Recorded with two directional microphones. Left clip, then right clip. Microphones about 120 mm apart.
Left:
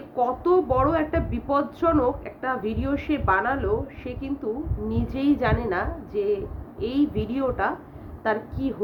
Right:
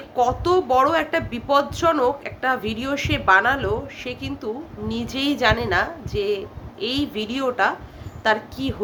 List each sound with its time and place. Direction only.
0.2 s a woman's voice: 15° right (ahead or behind)